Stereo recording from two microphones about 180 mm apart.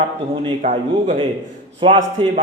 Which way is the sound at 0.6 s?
45° right (ahead or behind).